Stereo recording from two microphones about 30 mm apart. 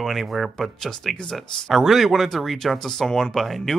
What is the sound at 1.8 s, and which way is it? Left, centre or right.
Speech, centre.